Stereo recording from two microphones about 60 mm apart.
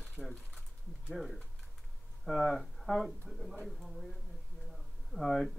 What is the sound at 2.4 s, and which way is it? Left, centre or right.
Speech, centre.